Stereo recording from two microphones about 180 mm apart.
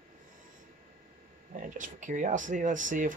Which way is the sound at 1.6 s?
45° right (ahead or behind).